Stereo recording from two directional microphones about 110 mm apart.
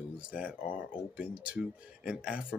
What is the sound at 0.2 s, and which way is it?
Speech, 10° right (ahead or behind).